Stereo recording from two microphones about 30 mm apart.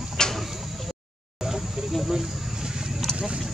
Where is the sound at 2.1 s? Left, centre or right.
Centre.